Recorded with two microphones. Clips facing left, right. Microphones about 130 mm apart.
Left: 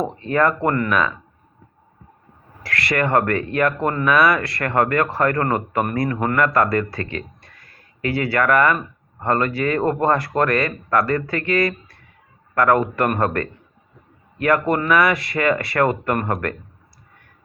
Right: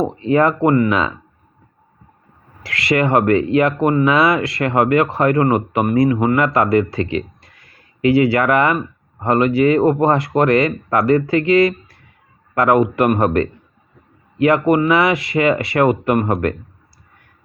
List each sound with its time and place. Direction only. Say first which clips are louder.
0.0 s speech: right 4 dB; 20° right (ahead or behind)
2.6 s speech: right 4 dB; 25° right (ahead or behind)